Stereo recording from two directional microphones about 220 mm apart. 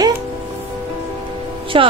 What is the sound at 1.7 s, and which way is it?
Speech, 25° right (ahead or behind).